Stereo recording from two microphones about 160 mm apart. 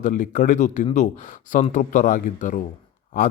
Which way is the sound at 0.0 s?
55° left (ahead or behind).